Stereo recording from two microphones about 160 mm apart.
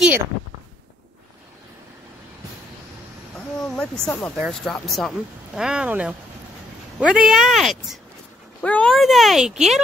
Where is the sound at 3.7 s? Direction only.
5° left (ahead or behind).